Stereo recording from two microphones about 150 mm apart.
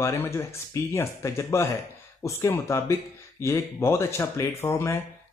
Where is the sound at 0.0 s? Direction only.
20° left (ahead or behind).